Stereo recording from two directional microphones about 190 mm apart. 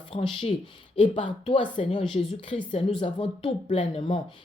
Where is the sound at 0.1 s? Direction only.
30° left (ahead or behind).